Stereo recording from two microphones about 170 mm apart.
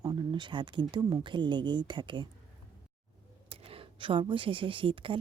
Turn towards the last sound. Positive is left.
turn(degrees=-30)  # may be behind; listen again after turning